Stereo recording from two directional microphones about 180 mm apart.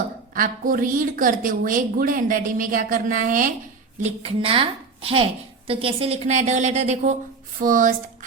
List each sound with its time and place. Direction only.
0.3 s a woman's voice: 50° right (ahead or behind)
4.0 s a woman's voice: 35° right (ahead or behind)